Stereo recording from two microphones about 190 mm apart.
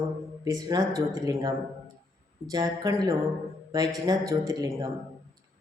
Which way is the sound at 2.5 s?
20° right (ahead or behind).